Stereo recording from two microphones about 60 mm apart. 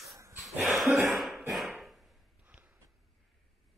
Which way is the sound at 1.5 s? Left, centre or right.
Centre.